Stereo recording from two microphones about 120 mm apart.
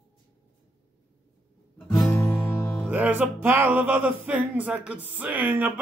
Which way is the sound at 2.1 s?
20° left (ahead or behind).